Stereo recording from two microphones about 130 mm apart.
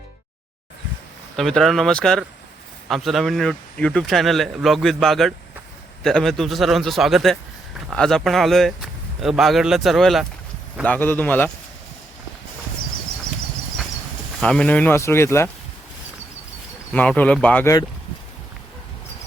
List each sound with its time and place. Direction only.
1.4 s speech: centre (ahead or behind)
10.8 s speech: 15° left (ahead or behind)
14.4 s speech: 10° left (ahead or behind)
16.9 s speech: 10° left (ahead or behind)